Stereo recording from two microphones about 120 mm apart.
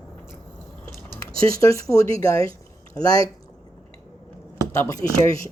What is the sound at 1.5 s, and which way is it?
Speech, 25° left (ahead or behind).